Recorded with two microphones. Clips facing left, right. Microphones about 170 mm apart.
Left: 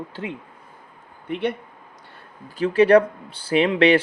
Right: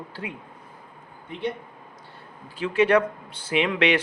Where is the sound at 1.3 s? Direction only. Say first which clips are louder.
Left 5 dB; 70° left (ahead or behind).